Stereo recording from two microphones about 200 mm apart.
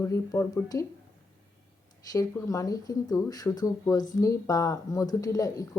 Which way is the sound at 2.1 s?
15° left (ahead or behind).